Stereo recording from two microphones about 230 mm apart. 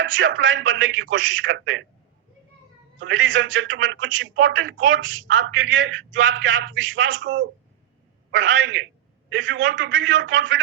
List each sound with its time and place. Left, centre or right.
0.0 s a man's voice: right
3.0 s a man's voice: right